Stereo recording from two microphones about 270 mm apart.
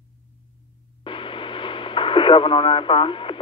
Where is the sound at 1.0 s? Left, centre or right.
Centre.